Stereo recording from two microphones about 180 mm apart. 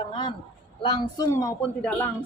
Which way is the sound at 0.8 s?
30° left (ahead or behind).